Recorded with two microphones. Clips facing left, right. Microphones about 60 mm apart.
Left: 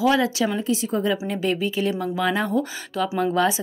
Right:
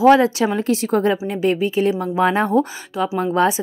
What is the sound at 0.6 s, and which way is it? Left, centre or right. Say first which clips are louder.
Speech: right 5 dB; right.